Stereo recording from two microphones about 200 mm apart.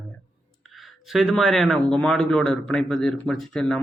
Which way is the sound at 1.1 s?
Centre (ahead or behind).